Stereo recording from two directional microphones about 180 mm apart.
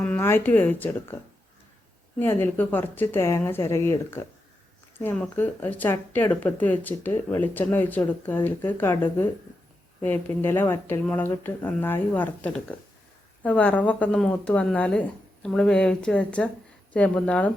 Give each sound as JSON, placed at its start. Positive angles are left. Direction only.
{"t": 0.0, "sound": "speech", "side_deg": 10}